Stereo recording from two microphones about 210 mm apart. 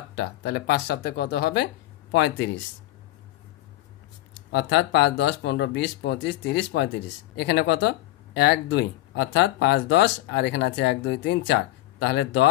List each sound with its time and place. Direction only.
0.1 s speech: 50° left (ahead or behind)
4.5 s speech: 55° left (ahead or behind)